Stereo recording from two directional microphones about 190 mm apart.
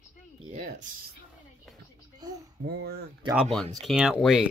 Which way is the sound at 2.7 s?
60° right (ahead or behind).